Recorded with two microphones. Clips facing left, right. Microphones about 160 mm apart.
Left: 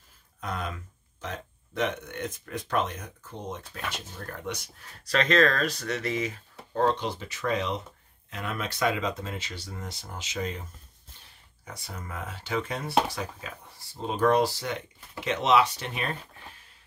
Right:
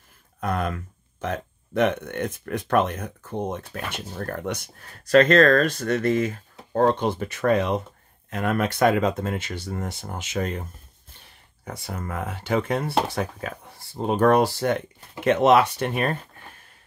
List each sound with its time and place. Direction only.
0.4 s speech: 60° right (ahead or behind)
11.6 s speech: 55° right (ahead or behind)